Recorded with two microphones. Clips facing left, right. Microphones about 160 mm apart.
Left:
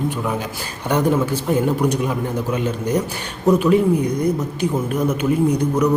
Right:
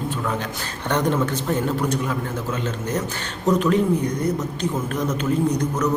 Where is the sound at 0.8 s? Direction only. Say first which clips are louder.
Left 3 dB; 10° left (ahead or behind).